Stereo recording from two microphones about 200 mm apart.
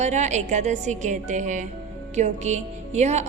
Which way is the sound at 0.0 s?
35° right (ahead or behind).